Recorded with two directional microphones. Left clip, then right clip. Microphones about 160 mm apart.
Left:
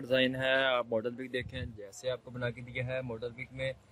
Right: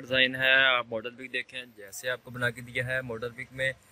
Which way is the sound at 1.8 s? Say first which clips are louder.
Right 3 dB; 10° left (ahead or behind).